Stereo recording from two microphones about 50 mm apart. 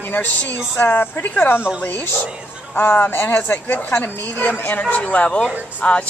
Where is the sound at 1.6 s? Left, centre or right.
Right.